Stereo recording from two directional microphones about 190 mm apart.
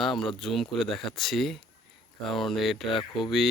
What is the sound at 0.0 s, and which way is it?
Speech, centre (ahead or behind).